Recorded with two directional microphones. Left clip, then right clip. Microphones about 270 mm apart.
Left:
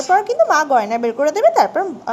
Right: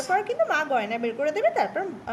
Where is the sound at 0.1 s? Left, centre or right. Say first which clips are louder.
Left 10 dB; left.